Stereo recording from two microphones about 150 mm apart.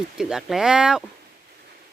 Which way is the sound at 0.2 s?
5° right (ahead or behind).